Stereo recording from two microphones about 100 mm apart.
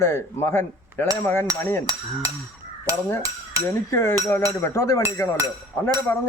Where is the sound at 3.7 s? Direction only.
25° left (ahead or behind).